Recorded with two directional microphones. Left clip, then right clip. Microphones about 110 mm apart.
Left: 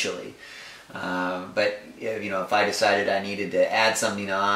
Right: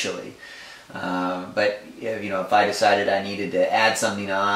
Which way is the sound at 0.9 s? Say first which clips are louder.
Right 2 dB; 10° left (ahead or behind).